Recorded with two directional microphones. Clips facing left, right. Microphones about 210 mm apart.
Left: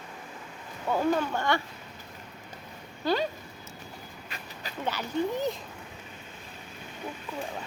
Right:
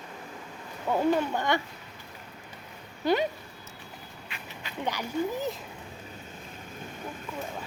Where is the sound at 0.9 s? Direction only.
15° right (ahead or behind).